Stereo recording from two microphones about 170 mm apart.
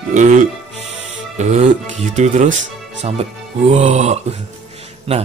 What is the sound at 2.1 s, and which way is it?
Speech, 45° right (ahead or behind).